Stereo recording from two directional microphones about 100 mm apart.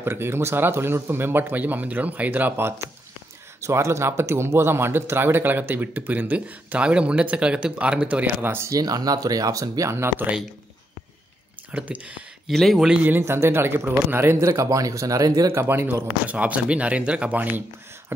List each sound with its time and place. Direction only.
0.0 s speech: 25° right (ahead or behind)
8.6 s speech: 40° right (ahead or behind); by 10.3 s 20° right (ahead or behind)
11.7 s speech: 15° right (ahead or behind)
12.4 s speech: centre (ahead or behind)
13.1 s speech: 25° right (ahead or behind)